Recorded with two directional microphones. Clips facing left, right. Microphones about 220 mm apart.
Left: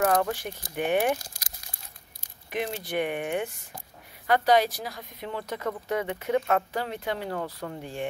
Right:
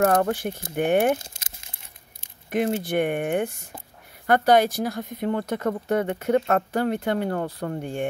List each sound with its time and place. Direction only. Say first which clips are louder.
0.2 s speech: right 5 dB; 50° right (ahead or behind)
0.5 s speech: right 7 dB; 25° right (ahead or behind)
0.7 s speech: right 5 dB; 50° right (ahead or behind)
1.1 s crumpling: right 4 dB; 25° right (ahead or behind)
2.5 s speech: right 7 dB; 50° right (ahead or behind)